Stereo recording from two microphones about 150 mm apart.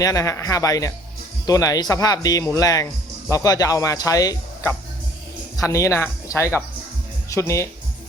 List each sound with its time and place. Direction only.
0.0 s speech: 20° left (ahead or behind)